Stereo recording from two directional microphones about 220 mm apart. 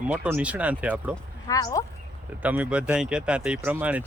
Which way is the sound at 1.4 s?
15° left (ahead or behind).